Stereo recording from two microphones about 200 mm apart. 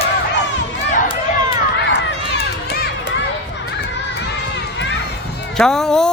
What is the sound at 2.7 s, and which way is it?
Run, 50° left (ahead or behind).